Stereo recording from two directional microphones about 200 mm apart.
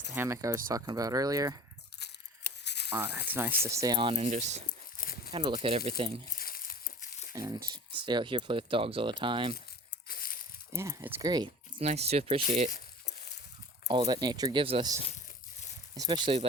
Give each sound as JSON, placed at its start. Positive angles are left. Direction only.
{"t": 0.1, "sound": "speech", "side_deg": -15}
{"t": 2.0, "sound": "a sound", "side_deg": 55}
{"t": 3.2, "sound": "speech", "side_deg": -10}
{"t": 5.0, "sound": "a sound", "side_deg": 40}
{"t": 5.3, "sound": "speech", "side_deg": -25}
{"t": 6.3, "sound": "crumpling", "side_deg": 45}
{"t": 7.3, "sound": "speech", "side_deg": -15}
{"t": 10.1, "sound": "a sound", "side_deg": 45}
{"t": 10.7, "sound": "speech", "side_deg": -15}
{"t": 11.8, "sound": "speech", "side_deg": -30}
{"t": 13.8, "sound": "speech", "side_deg": -25}